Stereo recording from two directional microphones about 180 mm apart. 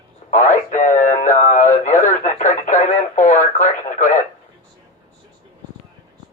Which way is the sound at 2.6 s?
45° left (ahead or behind).